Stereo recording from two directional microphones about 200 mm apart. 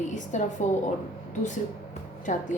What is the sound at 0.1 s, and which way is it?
Speech, 35° left (ahead or behind).